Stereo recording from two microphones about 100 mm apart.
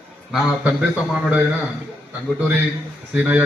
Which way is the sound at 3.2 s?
15° right (ahead or behind).